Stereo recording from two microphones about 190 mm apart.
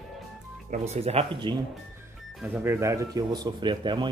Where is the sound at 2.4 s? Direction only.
10° right (ahead or behind).